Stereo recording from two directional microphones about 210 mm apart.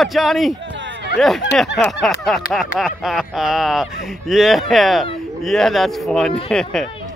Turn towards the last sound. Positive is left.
turn(degrees=5)  # may be behind; listen again after turning